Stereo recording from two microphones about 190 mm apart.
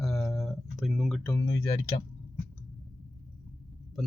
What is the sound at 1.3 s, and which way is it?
Speech, 20° left (ahead or behind).